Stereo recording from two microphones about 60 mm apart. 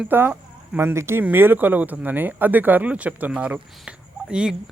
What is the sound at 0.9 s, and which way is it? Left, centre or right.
Speech, right.